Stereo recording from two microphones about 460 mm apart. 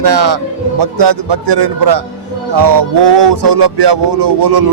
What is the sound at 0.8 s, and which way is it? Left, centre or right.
Music, right.